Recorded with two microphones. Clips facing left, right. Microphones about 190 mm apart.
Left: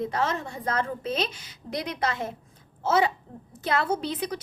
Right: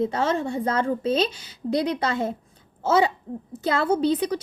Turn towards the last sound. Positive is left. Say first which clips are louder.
# right 7 dB
turn(degrees=-30)  # may be behind; listen again after turning